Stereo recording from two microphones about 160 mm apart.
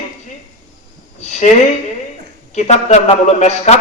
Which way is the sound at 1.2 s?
45° left (ahead or behind).